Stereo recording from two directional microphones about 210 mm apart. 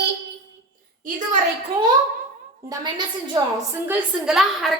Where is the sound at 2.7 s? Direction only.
20° right (ahead or behind).